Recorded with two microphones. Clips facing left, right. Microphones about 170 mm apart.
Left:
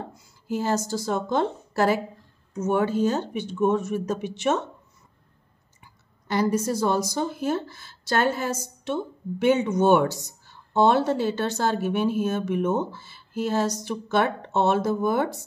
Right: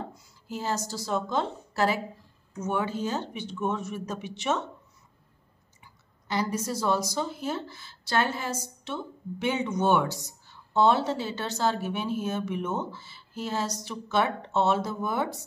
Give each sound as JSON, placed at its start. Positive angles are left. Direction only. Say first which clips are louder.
{"t": 0.0, "sound": "speech", "louder": "left 1 dB", "side_deg": 50}
{"t": 6.2, "sound": "speech", "louder": "left 6 dB", "side_deg": 50}